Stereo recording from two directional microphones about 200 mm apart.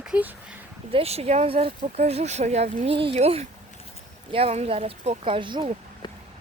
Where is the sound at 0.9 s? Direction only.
30° right (ahead or behind).